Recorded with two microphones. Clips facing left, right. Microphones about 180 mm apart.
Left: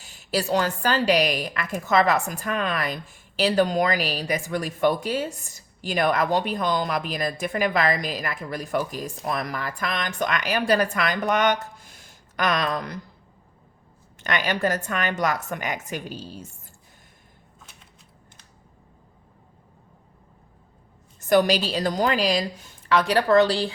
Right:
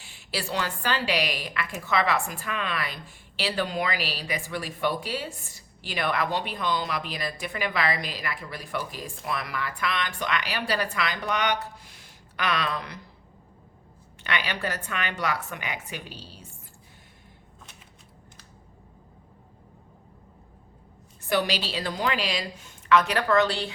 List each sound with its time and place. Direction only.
0.0 s a woman's voice: 45° left (ahead or behind)
14.3 s a woman's voice: 45° left (ahead or behind)
21.2 s a woman's voice: 45° left (ahead or behind)